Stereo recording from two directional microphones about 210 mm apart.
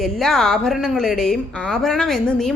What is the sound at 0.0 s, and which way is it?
A woman's voice, centre (ahead or behind).